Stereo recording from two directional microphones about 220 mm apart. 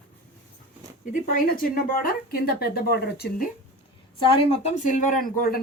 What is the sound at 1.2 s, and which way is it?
A woman's voice, 40° left (ahead or behind).